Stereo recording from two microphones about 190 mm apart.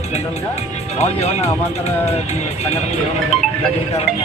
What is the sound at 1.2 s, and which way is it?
Speech, 35° left (ahead or behind).